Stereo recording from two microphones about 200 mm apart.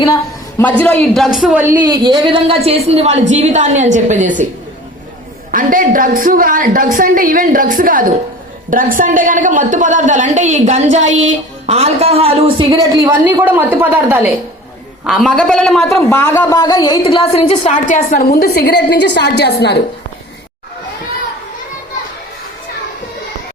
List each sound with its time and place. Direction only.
0.6 s a man's voice: 5° left (ahead or behind)
1.8 s a woman's voice: 20° right (ahead or behind); by 4.4 s 40° right (ahead or behind)
5.5 s a woman's voice: 40° right (ahead or behind); by 14.3 s 10° right (ahead or behind)
15.0 s a man's voice: centre (ahead or behind); by 19.8 s 55° left (ahead or behind)